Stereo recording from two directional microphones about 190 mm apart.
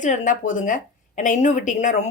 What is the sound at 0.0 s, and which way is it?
Speech, 40° left (ahead or behind).